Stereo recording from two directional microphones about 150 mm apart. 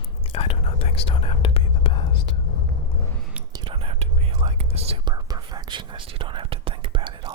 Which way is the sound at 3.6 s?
40° right (ahead or behind).